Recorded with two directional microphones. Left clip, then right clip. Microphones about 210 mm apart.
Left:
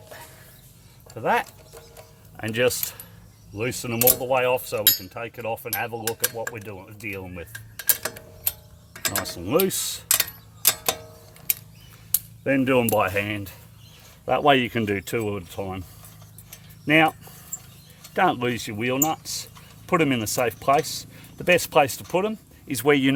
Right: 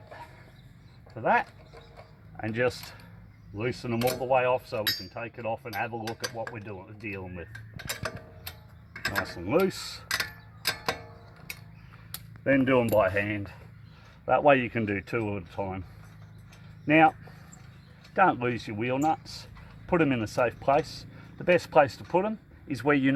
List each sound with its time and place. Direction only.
1.1 s speech: 45° left (ahead or behind)
9.0 s mechanisms: 10° left (ahead or behind)
9.2 s speech: 40° left (ahead or behind)
10.1 s clock: 10° left (ahead or behind)
12.5 s speech: 30° left (ahead or behind)
16.8 s speech: 35° left (ahead or behind)